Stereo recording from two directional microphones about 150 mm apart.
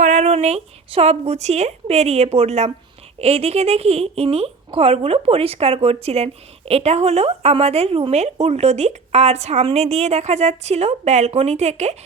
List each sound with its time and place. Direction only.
0.0 s a woman's voice: 55° right (ahead or behind)